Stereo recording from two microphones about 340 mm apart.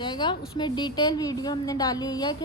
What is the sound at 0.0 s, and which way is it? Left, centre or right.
A woman's voice, centre.